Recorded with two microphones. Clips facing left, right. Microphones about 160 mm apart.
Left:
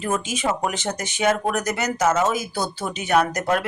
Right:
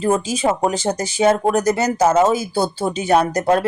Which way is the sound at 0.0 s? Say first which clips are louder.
Right 6 dB; 30° right (ahead or behind).